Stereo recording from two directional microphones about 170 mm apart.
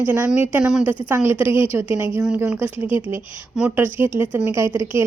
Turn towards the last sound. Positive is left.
turn(degrees=-15)  # may be behind; listen again after turning